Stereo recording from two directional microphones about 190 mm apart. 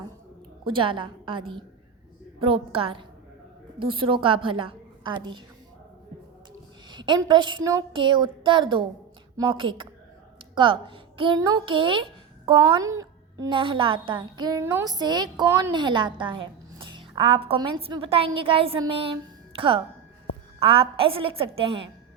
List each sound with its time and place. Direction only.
0.6 s a woman's voice: 25° right (ahead or behind)
6.9 s a woman's voice: 25° right (ahead or behind)